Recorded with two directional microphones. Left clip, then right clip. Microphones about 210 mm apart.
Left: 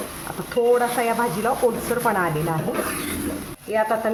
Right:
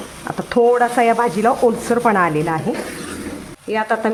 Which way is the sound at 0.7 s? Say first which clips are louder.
Right 5 dB; 45° right (ahead or behind).